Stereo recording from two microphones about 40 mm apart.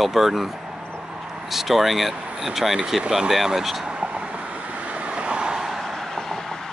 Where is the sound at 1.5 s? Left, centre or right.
Centre.